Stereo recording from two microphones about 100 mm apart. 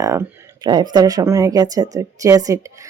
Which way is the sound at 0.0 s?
30° right (ahead or behind).